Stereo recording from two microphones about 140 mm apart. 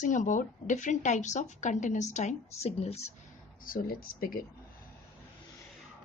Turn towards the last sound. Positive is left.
turn(degrees=90)